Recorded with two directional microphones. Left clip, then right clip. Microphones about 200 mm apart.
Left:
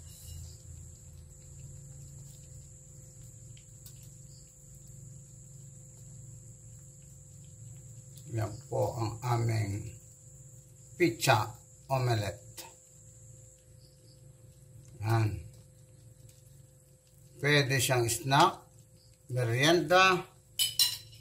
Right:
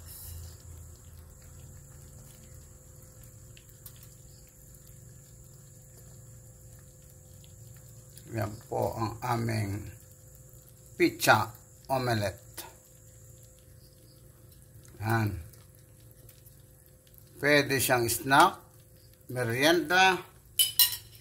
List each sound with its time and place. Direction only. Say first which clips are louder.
8.4 s speech: right 1 dB; 55° right (ahead or behind)
11.0 s speech: right 3 dB; 55° right (ahead or behind)
15.0 s a sound: right 3 dB; 55° right (ahead or behind)
17.4 s speech: right 3 dB; 55° right (ahead or behind)